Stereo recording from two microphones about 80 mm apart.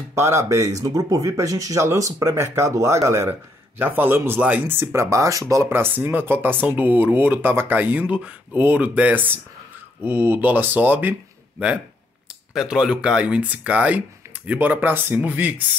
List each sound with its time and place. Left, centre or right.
0.1 s speech: right
3.3 s speech: right
4.9 s speech: right
5.7 s speech: right
12.5 s speech: centre